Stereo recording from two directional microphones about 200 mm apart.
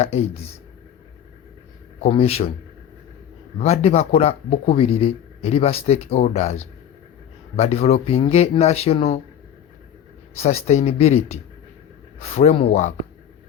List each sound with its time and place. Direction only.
0.0 s speech: 30° left (ahead or behind)
2.0 s a man's voice: 30° left (ahead or behind)
3.6 s speech: 30° left (ahead or behind)
10.3 s speech: 30° left (ahead or behind)